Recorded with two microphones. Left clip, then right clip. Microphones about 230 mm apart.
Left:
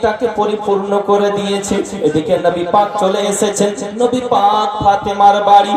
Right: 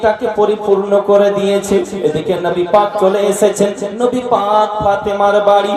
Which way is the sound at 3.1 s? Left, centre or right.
Left.